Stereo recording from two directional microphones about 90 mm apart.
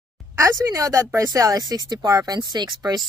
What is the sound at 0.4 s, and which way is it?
Speech, 35° right (ahead or behind).